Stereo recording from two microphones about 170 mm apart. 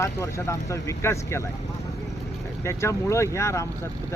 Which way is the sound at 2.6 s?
15° left (ahead or behind).